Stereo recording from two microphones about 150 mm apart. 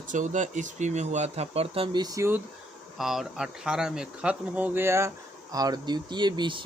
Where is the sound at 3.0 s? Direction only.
Centre (ahead or behind).